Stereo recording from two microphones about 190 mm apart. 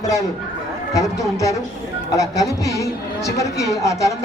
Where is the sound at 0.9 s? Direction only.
15° left (ahead or behind).